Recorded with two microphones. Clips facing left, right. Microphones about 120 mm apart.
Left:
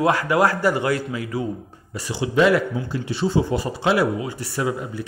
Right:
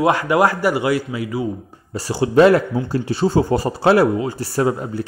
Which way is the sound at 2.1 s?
45° right (ahead or behind).